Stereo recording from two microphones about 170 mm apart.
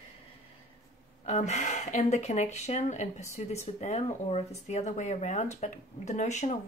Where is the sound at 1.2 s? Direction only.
45° left (ahead or behind).